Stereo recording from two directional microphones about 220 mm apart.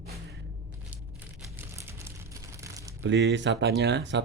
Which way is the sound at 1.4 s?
10° right (ahead or behind).